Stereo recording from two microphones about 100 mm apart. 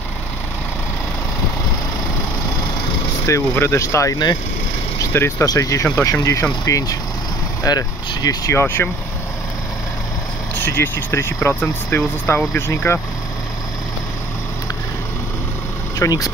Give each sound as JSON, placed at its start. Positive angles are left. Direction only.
{"t": 3.3, "sound": "speech", "side_deg": 25}
{"t": 8.5, "sound": "speech", "side_deg": 25}
{"t": 10.5, "sound": "speech", "side_deg": 20}
{"t": 16.0, "sound": "speech", "side_deg": 40}